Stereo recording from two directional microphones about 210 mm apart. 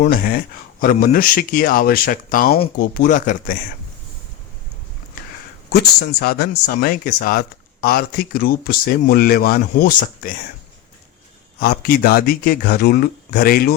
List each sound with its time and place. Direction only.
0.0 s speech: 40° left (ahead or behind)
5.7 s speech: 50° left (ahead or behind)
11.6 s speech: 45° left (ahead or behind)